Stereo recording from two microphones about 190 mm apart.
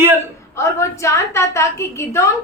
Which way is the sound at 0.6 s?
15° left (ahead or behind).